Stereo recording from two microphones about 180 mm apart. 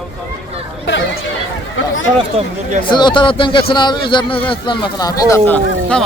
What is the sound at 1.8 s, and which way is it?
Speech, 90° left.